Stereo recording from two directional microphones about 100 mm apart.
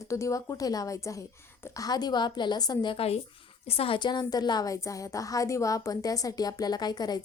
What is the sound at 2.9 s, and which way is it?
A woman's voice, 75° left (ahead or behind).